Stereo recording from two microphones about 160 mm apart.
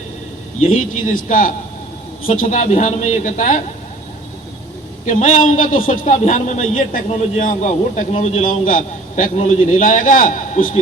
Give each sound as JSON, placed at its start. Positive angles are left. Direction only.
{"t": 0.7, "sound": "a man's voice", "side_deg": 55}
{"t": 5.0, "sound": "a man's voice", "side_deg": 55}